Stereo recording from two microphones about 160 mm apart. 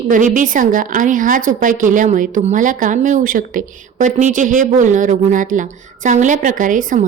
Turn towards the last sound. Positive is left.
turn(degrees=-55)  # may be behind; listen again after turning